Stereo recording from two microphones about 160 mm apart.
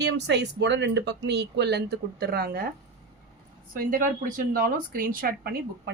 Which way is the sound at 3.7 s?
60° right (ahead or behind).